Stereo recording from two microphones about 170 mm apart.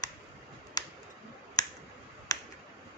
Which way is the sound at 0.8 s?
20° left (ahead or behind).